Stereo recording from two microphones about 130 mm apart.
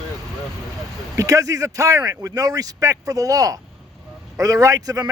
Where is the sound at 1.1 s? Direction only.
25° right (ahead or behind).